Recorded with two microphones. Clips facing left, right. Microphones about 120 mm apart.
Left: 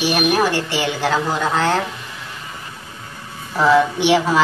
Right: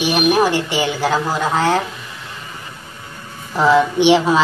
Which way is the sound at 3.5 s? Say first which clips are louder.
Right 1 dB; 15° right (ahead or behind).